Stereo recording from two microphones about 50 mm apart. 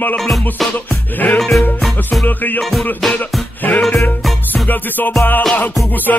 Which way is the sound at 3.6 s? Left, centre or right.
Left.